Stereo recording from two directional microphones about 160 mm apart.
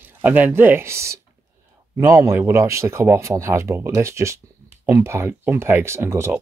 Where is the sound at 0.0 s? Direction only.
10° right (ahead or behind).